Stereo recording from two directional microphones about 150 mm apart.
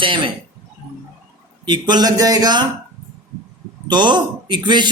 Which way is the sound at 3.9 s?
30° right (ahead or behind).